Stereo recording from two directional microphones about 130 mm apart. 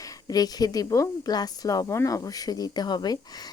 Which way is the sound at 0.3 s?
30° left (ahead or behind).